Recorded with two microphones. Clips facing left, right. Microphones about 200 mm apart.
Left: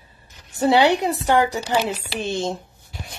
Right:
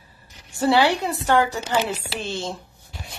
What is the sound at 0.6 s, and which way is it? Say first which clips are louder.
A woman's voice: left 2 dB; 20° left (ahead or behind).